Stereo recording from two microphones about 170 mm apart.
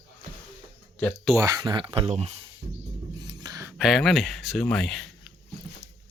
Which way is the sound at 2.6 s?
35° right (ahead or behind).